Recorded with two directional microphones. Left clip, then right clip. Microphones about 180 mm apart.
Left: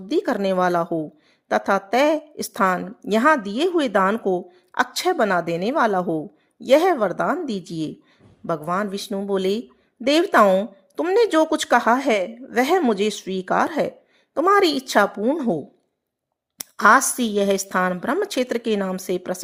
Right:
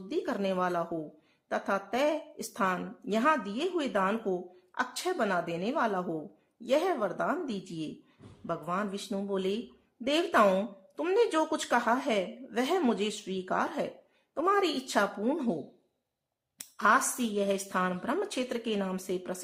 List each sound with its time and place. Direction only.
0.1 s a woman's voice: 40° left (ahead or behind)
10.4 s a woman's voice: 25° left (ahead or behind)
11.1 s a woman's voice: 40° left (ahead or behind)
16.6 s a woman's voice: 40° left (ahead or behind)